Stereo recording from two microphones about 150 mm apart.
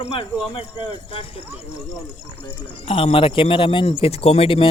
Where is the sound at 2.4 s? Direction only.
40° left (ahead or behind).